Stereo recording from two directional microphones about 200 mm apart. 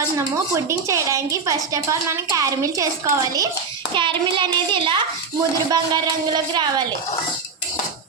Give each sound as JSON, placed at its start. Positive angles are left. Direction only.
{"t": 0.2, "sound": "a woman's voice", "side_deg": -15}